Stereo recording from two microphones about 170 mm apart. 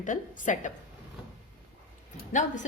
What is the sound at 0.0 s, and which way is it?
Speech, 50° left (ahead or behind).